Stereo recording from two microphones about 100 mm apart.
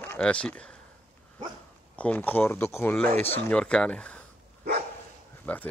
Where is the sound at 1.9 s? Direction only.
15° left (ahead or behind).